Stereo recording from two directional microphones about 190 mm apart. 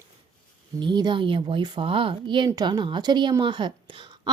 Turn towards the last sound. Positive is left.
turn(degrees=-25)  # may be behind; listen again after turning